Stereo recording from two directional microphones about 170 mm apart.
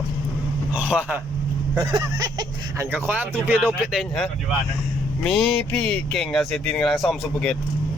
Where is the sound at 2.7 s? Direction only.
10° right (ahead or behind).